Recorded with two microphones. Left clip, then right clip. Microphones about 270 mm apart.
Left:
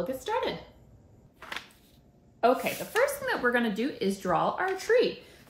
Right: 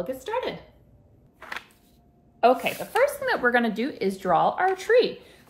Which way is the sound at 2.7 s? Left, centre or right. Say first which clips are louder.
Right 4 dB; centre.